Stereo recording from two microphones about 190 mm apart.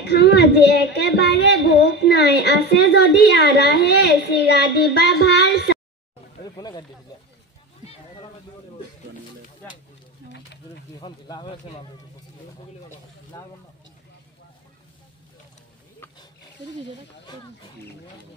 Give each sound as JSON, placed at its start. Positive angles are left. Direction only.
{"t": 0.0, "sound": "a sound", "side_deg": 60}
{"t": 0.7, "sound": "a child's voice", "side_deg": 60}
{"t": 6.5, "sound": "snake", "side_deg": 20}
{"t": 7.8, "sound": "a sound", "side_deg": 30}
{"t": 10.3, "sound": "speech", "side_deg": 65}
{"t": 11.0, "sound": "speech", "side_deg": 25}
{"t": 13.3, "sound": "speech", "side_deg": 15}